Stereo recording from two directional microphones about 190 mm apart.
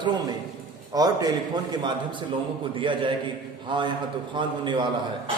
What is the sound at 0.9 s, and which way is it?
Speech, 20° right (ahead or behind).